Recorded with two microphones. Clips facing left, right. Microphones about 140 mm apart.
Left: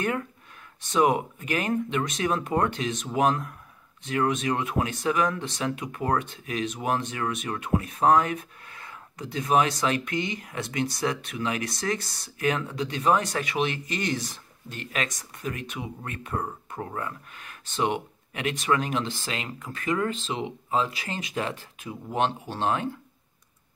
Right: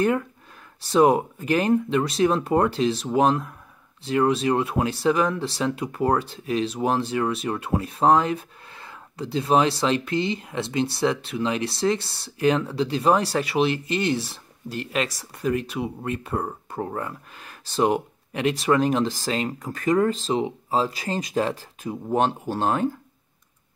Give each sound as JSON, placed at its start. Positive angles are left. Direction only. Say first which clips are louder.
{"t": 0.7, "sound": "speech", "louder": "right 5 dB", "side_deg": -35}